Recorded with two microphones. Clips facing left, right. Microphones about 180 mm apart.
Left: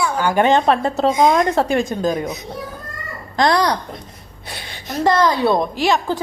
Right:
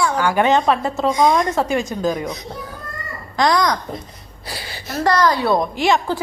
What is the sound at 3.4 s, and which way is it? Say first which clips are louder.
Speech: left 1 dB; 30° left (ahead or behind).